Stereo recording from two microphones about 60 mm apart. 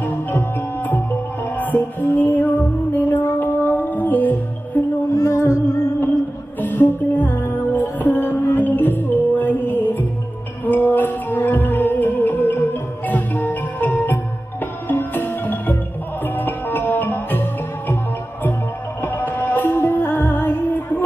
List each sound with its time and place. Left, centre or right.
0.0 s music: left
5.1 s music: left
6.6 s music: left
18.9 s music: left